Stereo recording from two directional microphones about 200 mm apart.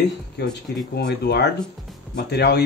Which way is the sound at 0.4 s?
55° left (ahead or behind).